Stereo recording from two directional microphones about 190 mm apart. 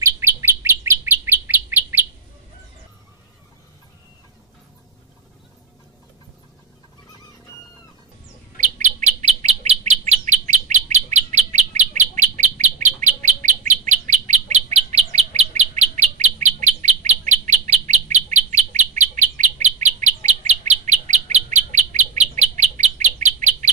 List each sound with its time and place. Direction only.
0.0 s bird: 15° right (ahead or behind)
8.5 s bird: 40° right (ahead or behind)